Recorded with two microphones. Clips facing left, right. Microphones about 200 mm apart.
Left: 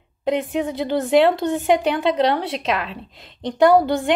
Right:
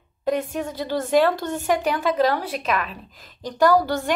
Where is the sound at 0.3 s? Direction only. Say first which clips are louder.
Left 3 dB; 15° left (ahead or behind).